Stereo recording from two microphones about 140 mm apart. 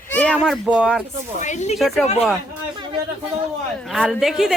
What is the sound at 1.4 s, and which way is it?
Speech, 55° left (ahead or behind).